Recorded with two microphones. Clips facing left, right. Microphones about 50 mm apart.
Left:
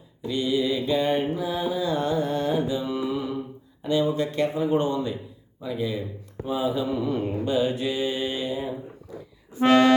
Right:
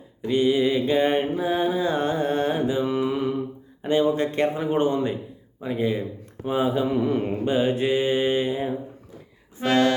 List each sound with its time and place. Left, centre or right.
0.2 s mantra: right
9.6 s music: left